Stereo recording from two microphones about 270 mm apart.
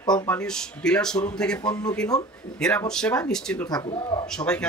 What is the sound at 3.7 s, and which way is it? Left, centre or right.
Speech, centre.